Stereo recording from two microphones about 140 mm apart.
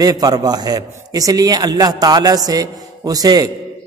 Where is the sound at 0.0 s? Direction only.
25° right (ahead or behind).